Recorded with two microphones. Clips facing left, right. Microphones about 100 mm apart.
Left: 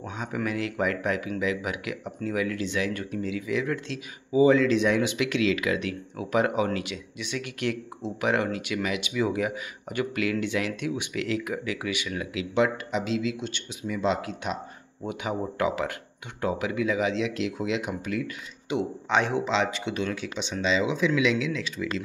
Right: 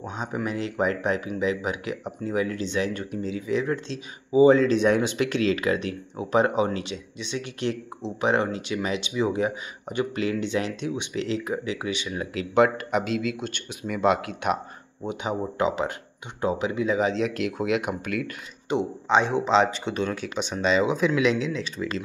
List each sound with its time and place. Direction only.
0.0 s speech: 25° right (ahead or behind)
12.4 s speech: 50° right (ahead or behind)
15.0 s speech: 25° right (ahead or behind); by 18.3 s 55° right (ahead or behind)
18.8 s speech: 20° right (ahead or behind)
19.4 s speech: 35° right (ahead or behind)